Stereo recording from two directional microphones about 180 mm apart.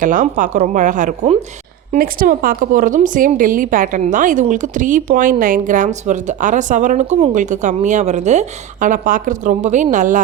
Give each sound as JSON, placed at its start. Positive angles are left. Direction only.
{"t": 0.0, "sound": "a woman's voice", "side_deg": -45}
{"t": 1.9, "sound": "a woman's voice", "side_deg": -50}